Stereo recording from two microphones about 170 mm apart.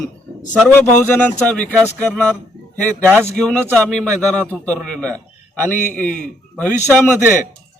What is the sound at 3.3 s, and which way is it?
A man's voice, 5° left (ahead or behind).